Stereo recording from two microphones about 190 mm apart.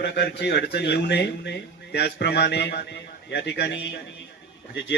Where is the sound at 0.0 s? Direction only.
65° left (ahead or behind).